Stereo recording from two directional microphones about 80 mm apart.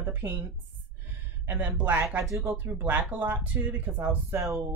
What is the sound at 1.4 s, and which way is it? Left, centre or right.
Speech, right.